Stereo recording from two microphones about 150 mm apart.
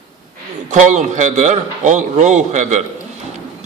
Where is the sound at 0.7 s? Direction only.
55° right (ahead or behind).